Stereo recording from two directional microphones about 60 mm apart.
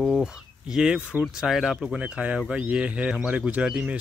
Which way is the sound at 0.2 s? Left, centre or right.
Centre.